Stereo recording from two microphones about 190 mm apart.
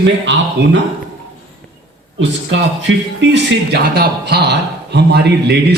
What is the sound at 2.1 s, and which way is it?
Speech, 75° right (ahead or behind).